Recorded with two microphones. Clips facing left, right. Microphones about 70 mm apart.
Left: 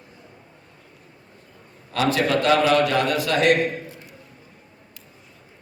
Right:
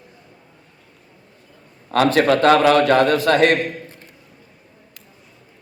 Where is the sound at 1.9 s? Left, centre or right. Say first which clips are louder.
Right 6 dB; right.